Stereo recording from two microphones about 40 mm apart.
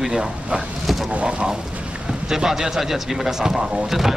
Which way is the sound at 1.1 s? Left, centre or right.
Right.